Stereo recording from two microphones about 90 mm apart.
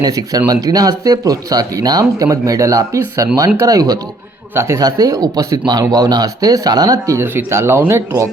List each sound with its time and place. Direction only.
0.0 s speech: 45° right (ahead or behind)
4.5 s speech: 30° right (ahead or behind)
4.8 s speech: 45° right (ahead or behind)
7.3 s speech: 30° right (ahead or behind)